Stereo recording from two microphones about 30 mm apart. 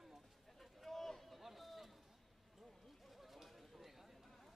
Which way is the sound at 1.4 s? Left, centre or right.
Centre.